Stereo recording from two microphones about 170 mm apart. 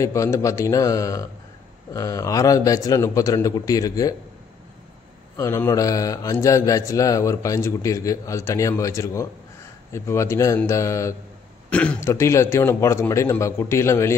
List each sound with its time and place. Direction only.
0.0 s a man's voice: 15° left (ahead or behind)
5.4 s mantra: 15° left (ahead or behind)
11.7 s mantra: 10° left (ahead or behind)